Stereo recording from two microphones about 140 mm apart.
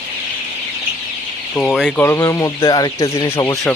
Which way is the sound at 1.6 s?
5° left (ahead or behind).